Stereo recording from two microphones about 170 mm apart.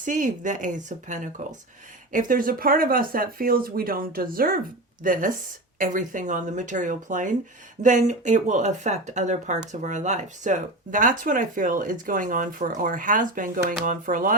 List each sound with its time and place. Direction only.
0.0 s speech: 50° right (ahead or behind)